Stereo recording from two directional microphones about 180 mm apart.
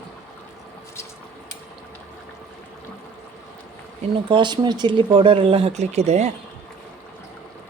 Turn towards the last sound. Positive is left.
turn(degrees=-40)  # may be behind; listen again after turning